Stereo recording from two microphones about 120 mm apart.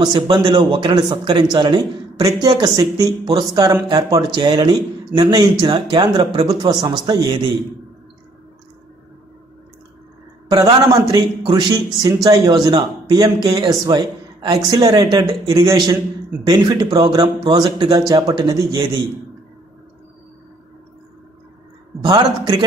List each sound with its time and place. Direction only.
0.0 s speech: 40° right (ahead or behind)
10.5 s speech: 35° right (ahead or behind)
22.0 s speech: 35° right (ahead or behind)